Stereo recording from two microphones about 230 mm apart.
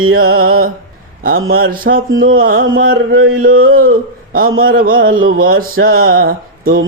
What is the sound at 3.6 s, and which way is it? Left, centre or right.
Speech, right.